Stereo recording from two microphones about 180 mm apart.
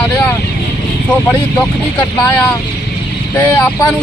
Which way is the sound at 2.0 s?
10° left (ahead or behind).